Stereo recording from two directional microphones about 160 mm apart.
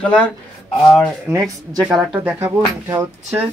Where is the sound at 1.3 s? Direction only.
15° right (ahead or behind).